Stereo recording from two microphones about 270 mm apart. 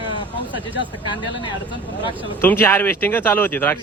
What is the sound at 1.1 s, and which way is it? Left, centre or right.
A man's voice, centre.